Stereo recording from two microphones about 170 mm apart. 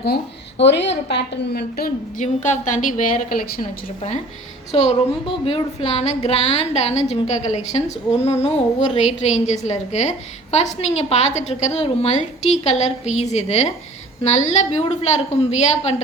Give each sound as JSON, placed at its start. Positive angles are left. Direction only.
{"t": 0.6, "sound": "a woman's voice", "side_deg": 90}
{"t": 2.2, "sound": "a woman's voice", "side_deg": 45}
{"t": 4.7, "sound": "a woman's voice", "side_deg": 40}